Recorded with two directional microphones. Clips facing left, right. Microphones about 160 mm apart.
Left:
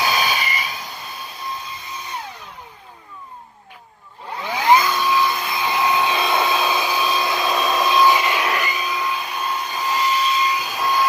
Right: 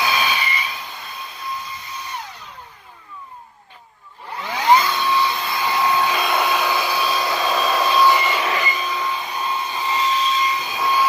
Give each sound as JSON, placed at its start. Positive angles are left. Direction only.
{"t": 0.0, "sound": "vehicle", "side_deg": 40}
{"t": 4.3, "sound": "a sound", "side_deg": 15}
{"t": 4.9, "sound": "music", "side_deg": 10}
{"t": 5.5, "sound": "vacuum cleaner", "side_deg": 15}
{"t": 7.4, "sound": "hair dryer", "side_deg": 0}
{"t": 7.7, "sound": "vacuum cleaner", "side_deg": -5}
{"t": 7.9, "sound": "vacuum cleaner", "side_deg": 15}
{"t": 8.7, "sound": "a sound", "side_deg": 10}